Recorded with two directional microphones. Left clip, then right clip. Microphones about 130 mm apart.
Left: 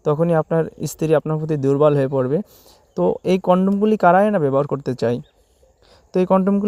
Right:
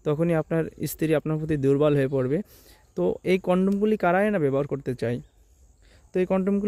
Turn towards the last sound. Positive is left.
turn(degrees=15)  # may be behind; listen again after turning